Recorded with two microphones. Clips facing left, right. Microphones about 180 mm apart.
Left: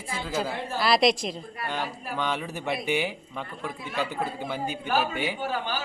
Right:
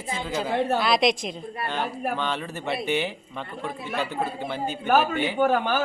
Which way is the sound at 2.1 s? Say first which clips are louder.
Right 1 dB; 10° left (ahead or behind).